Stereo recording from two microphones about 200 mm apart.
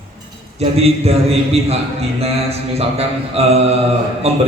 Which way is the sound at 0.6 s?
30° right (ahead or behind).